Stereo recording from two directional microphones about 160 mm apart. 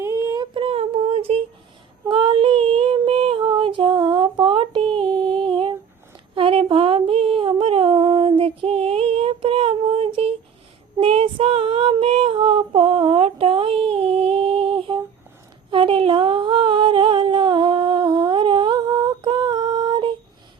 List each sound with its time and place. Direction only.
0.0 s child singing: 15° right (ahead or behind)
0.5 s a sound: 35° right (ahead or behind)
2.0 s child singing: 35° right (ahead or behind)
3.0 s a sound: 35° right (ahead or behind)
11.0 s child singing: 35° right (ahead or behind)
15.7 s humming: 35° right (ahead or behind)